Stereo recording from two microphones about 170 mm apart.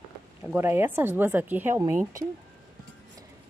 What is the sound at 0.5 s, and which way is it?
Speech, 15° right (ahead or behind).